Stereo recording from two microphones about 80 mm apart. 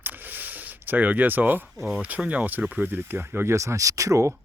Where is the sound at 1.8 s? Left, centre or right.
Centre.